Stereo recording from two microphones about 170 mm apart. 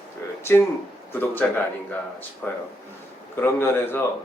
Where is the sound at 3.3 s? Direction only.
15° left (ahead or behind).